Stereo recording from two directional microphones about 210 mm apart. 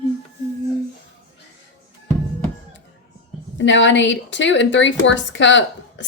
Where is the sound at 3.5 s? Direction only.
60° left (ahead or behind).